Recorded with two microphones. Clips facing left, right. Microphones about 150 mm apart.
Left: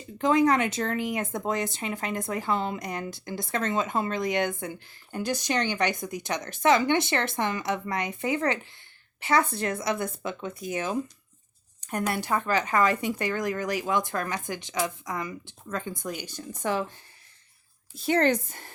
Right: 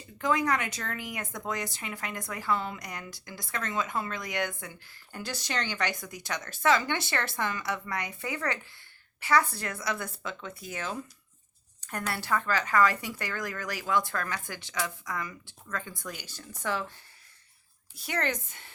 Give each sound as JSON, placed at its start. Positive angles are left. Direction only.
{"t": 0.2, "sound": "speech", "side_deg": 25}
{"t": 17.9, "sound": "speech", "side_deg": 25}